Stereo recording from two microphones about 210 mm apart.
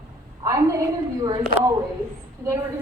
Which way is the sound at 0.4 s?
15° right (ahead or behind).